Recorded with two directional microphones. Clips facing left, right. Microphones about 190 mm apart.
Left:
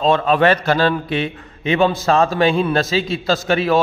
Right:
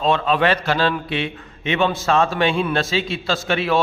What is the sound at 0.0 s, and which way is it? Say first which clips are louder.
A man's voice: left 3 dB; 45° left (ahead or behind).